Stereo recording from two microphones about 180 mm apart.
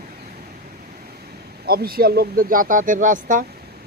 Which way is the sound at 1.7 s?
60° right (ahead or behind).